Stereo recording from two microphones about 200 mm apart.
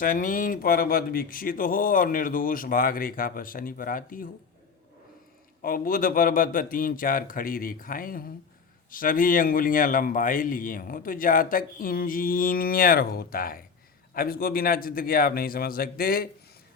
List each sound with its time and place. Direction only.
0.0 s a man's voice: 45° left (ahead or behind)
5.6 s a man's voice: 45° left (ahead or behind)